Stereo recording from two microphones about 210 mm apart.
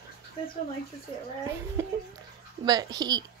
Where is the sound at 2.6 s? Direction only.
20° right (ahead or behind).